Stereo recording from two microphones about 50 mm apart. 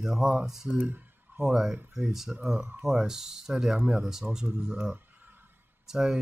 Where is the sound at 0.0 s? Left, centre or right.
Centre.